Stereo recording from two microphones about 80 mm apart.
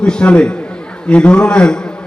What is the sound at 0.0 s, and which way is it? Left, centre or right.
A man's voice, centre.